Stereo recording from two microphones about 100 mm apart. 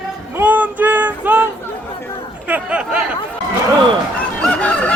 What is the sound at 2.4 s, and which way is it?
Speech, 15° right (ahead or behind).